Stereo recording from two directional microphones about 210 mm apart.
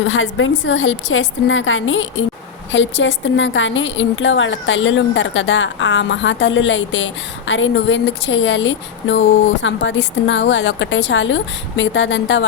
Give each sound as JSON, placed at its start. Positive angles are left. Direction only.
{"t": 0.0, "sound": "a woman's voice", "side_deg": 70}